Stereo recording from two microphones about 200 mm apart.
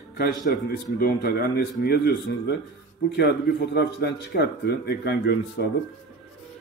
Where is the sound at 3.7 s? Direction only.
55° left (ahead or behind).